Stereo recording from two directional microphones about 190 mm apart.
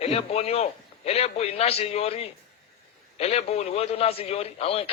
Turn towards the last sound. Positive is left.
turn(degrees=30)  # may be behind; listen again after turning